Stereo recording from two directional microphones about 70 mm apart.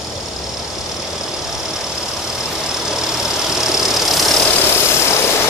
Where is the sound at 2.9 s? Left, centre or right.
Centre.